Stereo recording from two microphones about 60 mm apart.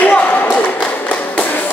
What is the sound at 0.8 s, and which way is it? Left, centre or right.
Tap, left.